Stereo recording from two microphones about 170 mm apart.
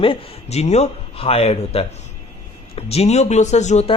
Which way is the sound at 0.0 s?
35° left (ahead or behind).